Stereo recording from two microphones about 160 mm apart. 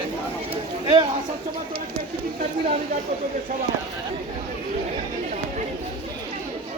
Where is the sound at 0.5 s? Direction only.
35° right (ahead or behind).